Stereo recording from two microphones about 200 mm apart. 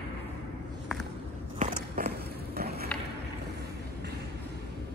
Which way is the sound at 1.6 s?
45° right (ahead or behind).